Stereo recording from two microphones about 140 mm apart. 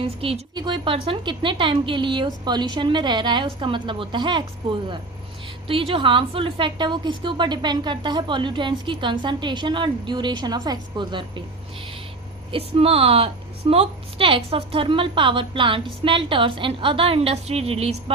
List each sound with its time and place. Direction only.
0.0 s a woman's voice: 45° right (ahead or behind)
5.6 s a woman's voice: 40° right (ahead or behind)
12.5 s a woman's voice: 40° right (ahead or behind)